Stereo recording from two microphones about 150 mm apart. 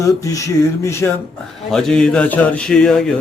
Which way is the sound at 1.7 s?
5° left (ahead or behind).